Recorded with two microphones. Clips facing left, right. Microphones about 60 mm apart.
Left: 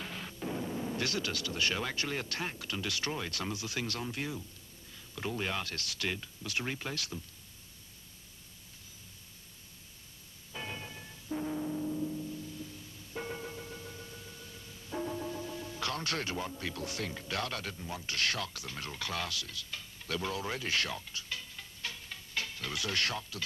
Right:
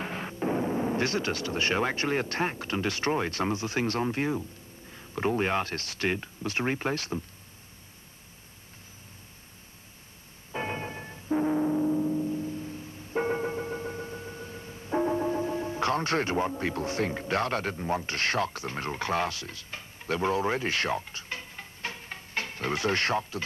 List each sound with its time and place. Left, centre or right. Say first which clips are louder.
0.0 s speech: right 9 dB; right
10.5 s music: right 9 dB; right